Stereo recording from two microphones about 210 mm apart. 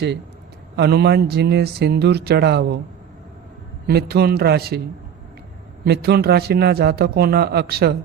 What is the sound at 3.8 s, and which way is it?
Speech, 50° right (ahead or behind).